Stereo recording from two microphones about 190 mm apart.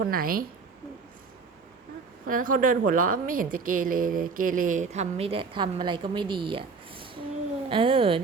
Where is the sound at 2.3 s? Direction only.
45° right (ahead or behind).